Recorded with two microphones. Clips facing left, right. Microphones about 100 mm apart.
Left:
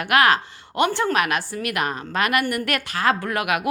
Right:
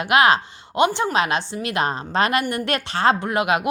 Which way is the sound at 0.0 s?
20° right (ahead or behind).